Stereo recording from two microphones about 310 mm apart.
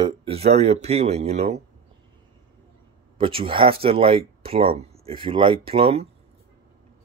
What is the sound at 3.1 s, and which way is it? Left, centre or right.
Speech, centre.